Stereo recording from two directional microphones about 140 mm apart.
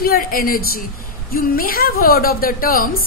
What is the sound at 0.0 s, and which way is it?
A woman's voice, 90° left.